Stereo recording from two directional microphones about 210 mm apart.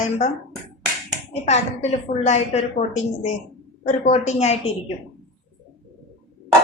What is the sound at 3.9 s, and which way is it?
Speech, 35° left (ahead or behind).